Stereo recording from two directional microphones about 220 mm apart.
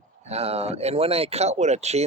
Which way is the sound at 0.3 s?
30° right (ahead or behind).